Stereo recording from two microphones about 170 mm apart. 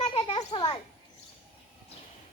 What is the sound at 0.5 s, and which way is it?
Speech, 30° left (ahead or behind).